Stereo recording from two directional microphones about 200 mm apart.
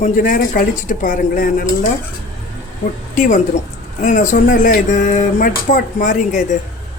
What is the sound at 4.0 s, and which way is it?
Speech, 40° left (ahead or behind).